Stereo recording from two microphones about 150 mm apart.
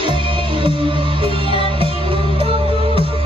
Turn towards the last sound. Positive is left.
turn(degrees=-35)  # may be behind; listen again after turning